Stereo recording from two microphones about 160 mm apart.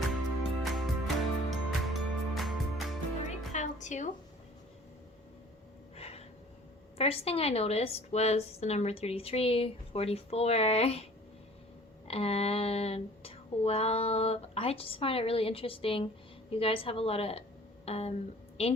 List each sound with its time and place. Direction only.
0.6 s music: centre (ahead or behind)
3.2 s music: 50° left (ahead or behind)
6.0 s a sound: 40° left (ahead or behind)
7.0 s a woman's voice: 40° left (ahead or behind)
12.0 s a woman's voice: 40° left (ahead or behind)